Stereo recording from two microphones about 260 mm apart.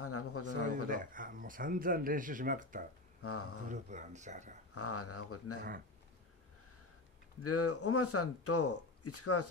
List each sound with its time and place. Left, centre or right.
0.0 s a sound: left
0.8 s speech: right
3.2 s speech: left
3.6 s speech: right
4.7 s speech: left
7.4 s speech: left